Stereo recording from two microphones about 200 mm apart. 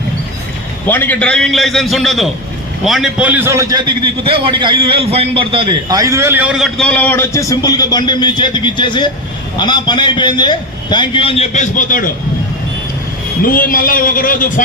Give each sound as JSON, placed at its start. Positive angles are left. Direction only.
{"t": 0.9, "sound": "a man's voice", "side_deg": 10}
{"t": 13.4, "sound": "speech", "side_deg": 45}